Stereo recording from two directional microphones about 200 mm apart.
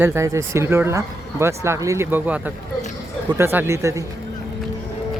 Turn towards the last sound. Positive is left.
turn(degrees=-15)  # may be behind; listen again after turning